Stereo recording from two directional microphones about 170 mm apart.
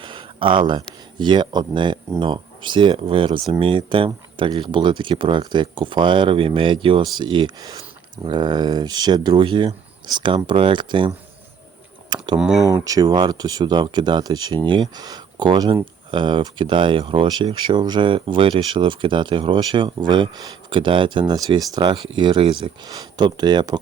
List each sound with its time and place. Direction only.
0.0 s speech: 30° right (ahead or behind)
12.1 s a sound: 25° right (ahead or behind)
12.4 s speech: 5° right (ahead or behind)
12.7 s speech: 20° right (ahead or behind)